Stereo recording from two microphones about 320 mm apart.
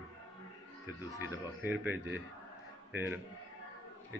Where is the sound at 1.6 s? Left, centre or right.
Centre.